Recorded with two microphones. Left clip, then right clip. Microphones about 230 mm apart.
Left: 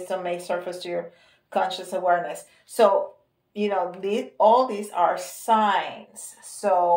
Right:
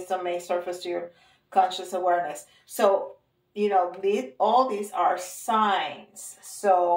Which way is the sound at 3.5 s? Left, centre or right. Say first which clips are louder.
Right 2 dB; left.